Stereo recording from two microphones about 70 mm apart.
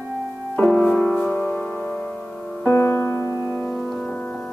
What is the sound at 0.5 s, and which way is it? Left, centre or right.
Music, centre.